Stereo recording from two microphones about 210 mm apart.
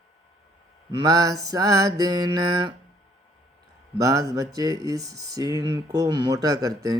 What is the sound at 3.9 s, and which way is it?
Speech, 15° right (ahead or behind).